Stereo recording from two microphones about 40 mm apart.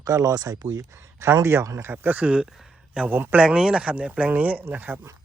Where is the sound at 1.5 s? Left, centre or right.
Right.